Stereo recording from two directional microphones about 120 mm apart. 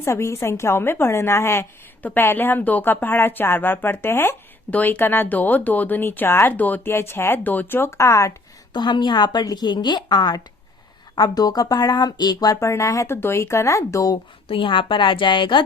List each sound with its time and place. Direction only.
0.0 s a woman's voice: 25° left (ahead or behind)
8.7 s a woman's voice: 40° left (ahead or behind)
14.4 s a woman's voice: 45° left (ahead or behind)